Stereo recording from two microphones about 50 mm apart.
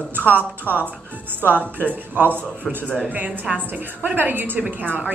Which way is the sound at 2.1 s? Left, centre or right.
Right.